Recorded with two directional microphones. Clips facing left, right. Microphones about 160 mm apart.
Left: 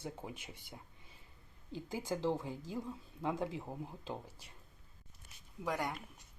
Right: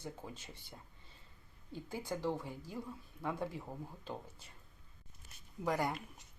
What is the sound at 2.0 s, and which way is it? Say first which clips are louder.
Speech: left 3 dB; 20° left (ahead or behind).